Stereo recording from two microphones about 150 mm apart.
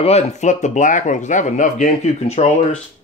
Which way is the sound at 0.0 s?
45° left (ahead or behind).